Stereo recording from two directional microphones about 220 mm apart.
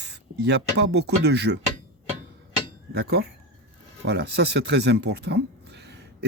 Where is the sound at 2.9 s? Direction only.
45° right (ahead or behind).